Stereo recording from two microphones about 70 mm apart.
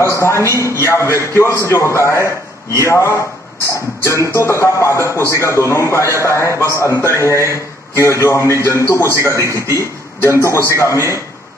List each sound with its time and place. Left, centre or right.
0.0 s a man's voice: left